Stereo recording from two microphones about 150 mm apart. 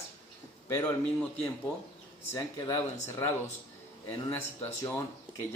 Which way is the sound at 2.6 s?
20° left (ahead or behind).